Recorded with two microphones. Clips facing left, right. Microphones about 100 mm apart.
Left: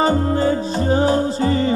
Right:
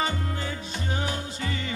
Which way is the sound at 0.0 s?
35° left (ahead or behind).